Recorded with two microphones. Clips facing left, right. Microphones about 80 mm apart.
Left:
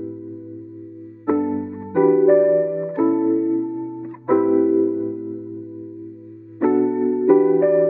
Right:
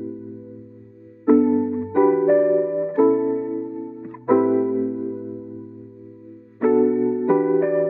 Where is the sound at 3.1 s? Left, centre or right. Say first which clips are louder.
Left 1 dB; left.